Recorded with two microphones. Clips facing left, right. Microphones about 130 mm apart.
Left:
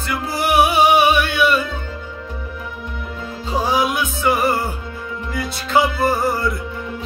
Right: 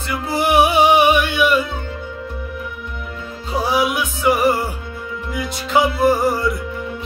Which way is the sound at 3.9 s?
10° right (ahead or behind).